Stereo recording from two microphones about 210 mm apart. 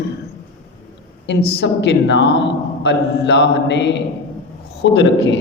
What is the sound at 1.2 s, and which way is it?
A woman's voice, 50° left (ahead or behind).